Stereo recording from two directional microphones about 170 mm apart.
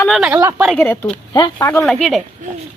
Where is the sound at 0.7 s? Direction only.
5° left (ahead or behind).